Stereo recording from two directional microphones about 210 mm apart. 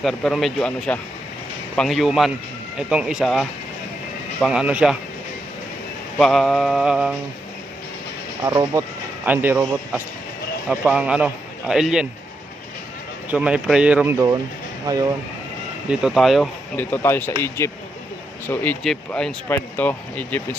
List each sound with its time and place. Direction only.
0.0 s speech: centre (ahead or behind)
6.1 s speech: centre (ahead or behind)
8.4 s a man's voice: 15° right (ahead or behind)
13.3 s a man's voice: 5° right (ahead or behind)
15.9 s speech: 5° right (ahead or behind)